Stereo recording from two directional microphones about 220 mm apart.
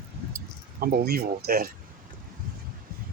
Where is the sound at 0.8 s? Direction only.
45° right (ahead or behind).